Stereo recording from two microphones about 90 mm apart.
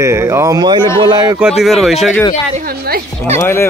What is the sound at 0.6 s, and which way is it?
Speech, 55° right (ahead or behind).